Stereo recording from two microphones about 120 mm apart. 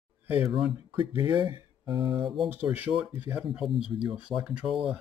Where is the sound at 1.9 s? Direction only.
35° right (ahead or behind).